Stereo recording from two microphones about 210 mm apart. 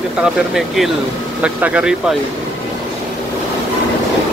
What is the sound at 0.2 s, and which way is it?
Speech, centre (ahead or behind).